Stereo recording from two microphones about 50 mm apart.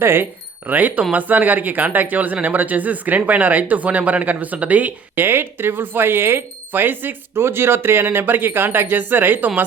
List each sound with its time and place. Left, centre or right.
0.0 s speech: right
0.7 s speech: right
5.1 s speech: right
7.3 s speech: right